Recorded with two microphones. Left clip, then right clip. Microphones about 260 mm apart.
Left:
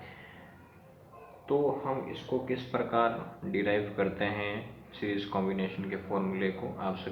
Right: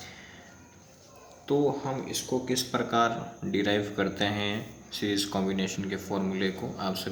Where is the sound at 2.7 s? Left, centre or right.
Right.